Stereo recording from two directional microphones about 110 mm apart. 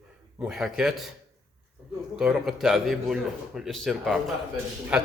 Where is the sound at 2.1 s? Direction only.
5° right (ahead or behind).